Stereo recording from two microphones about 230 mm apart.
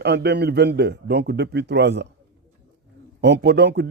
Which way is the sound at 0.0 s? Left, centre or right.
Right.